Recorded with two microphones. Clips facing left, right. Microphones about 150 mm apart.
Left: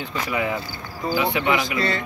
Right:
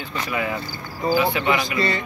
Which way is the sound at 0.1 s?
15° left (ahead or behind).